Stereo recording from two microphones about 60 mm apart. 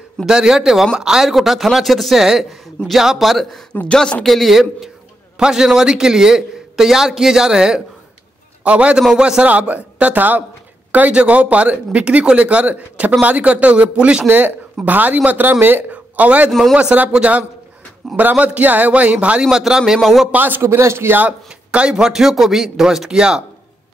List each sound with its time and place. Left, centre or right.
0.3 s a man's voice: centre
3.8 s a man's voice: centre
14.2 s speech: right
16.4 s speech: centre
16.7 s a man's voice: right
19.5 s a man's voice: centre
20.2 s speech: right
20.6 s speech: right
21.5 s a man's voice: centre